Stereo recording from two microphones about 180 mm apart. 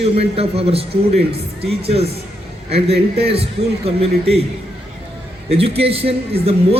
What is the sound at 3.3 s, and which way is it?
A man's voice, 35° right (ahead or behind).